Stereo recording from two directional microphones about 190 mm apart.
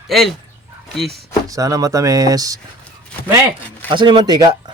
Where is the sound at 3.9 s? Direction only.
25° right (ahead or behind).